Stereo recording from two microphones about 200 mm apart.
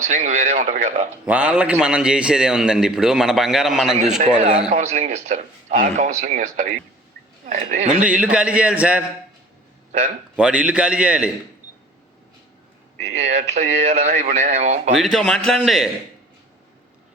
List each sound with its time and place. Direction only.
0.0 s speech: 35° right (ahead or behind)
1.2 s a man's voice: 5° right (ahead or behind)
4.7 s speech: 35° right (ahead or behind)
7.9 s a man's voice: 5° right (ahead or behind)
10.3 s a man's voice: 5° right (ahead or behind)
13.0 s speech: 35° right (ahead or behind)
14.9 s a man's voice: centre (ahead or behind)